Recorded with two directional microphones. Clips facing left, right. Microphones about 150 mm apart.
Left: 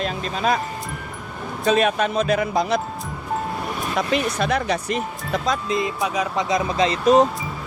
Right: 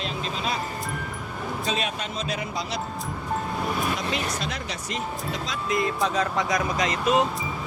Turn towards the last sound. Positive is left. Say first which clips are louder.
# left 7 dB
turn(degrees=35)  # may be behind; listen again after turning